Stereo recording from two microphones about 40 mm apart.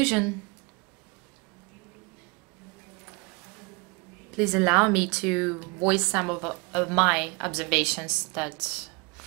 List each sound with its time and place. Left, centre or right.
0.0 s speech: centre
3.0 s a sound: centre
4.3 s speech: centre